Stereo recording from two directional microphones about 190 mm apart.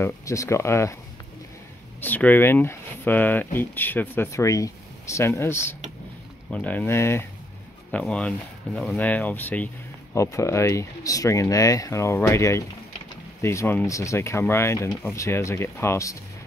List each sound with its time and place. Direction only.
0.0 s speech: 15° left (ahead or behind)
2.0 s speech: 10° left (ahead or behind)